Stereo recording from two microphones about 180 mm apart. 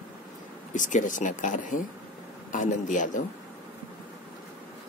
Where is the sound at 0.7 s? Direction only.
45° left (ahead or behind).